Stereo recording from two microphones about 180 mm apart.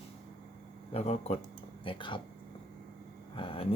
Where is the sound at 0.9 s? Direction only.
35° left (ahead or behind).